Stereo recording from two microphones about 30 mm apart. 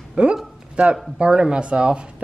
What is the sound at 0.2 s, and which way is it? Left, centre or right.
Speech, right.